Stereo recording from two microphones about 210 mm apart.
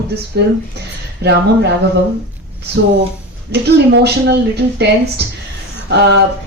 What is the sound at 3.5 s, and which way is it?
A woman's voice, 50° right (ahead or behind).